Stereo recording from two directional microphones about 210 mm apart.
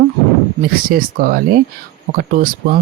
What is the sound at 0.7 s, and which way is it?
Speech, 45° right (ahead or behind).